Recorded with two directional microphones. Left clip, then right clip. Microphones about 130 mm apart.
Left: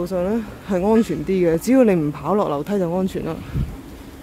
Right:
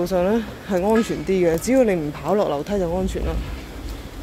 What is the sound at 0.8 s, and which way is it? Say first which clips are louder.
Speech: left 2 dB; 40° left (ahead or behind).